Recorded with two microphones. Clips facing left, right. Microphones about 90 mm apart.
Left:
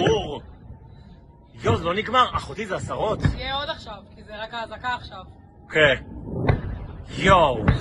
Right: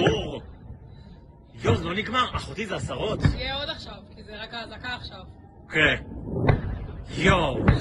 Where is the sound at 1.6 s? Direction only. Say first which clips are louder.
Left 3 dB; 70° left (ahead or behind).